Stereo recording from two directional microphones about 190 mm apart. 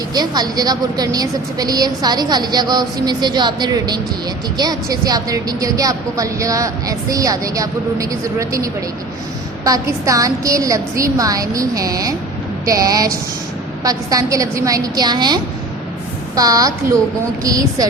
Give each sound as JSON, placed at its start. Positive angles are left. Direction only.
{"t": 0.1, "sound": "a woman's voice", "side_deg": -20}